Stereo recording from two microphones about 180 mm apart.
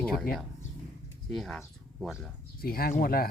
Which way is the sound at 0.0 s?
Centre (ahead or behind).